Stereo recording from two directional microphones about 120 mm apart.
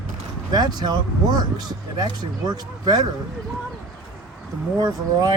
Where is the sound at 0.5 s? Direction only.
35° right (ahead or behind).